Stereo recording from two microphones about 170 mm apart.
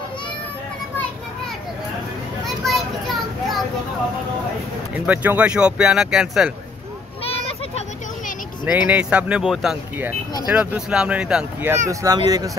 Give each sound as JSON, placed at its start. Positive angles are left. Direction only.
{"t": 2.4, "sound": "children playing", "side_deg": 0}
{"t": 5.0, "sound": "speech", "side_deg": -10}
{"t": 7.2, "sound": "children playing", "side_deg": 35}
{"t": 8.6, "sound": "speech", "side_deg": -10}
{"t": 11.9, "sound": "speech", "side_deg": -20}